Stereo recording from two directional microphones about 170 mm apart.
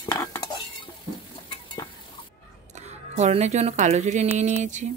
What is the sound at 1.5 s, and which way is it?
Frying, 25° left (ahead or behind).